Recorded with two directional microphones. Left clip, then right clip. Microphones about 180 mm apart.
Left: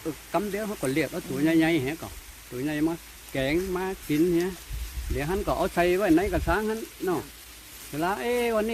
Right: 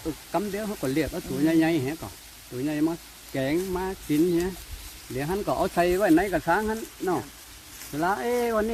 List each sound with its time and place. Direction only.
0.3 s speech: 5° left (ahead or behind)
7.9 s speech: 10° left (ahead or behind)